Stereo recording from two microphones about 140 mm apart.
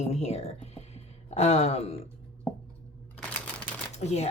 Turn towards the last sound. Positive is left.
turn(degrees=50)  # may be behind; listen again after turning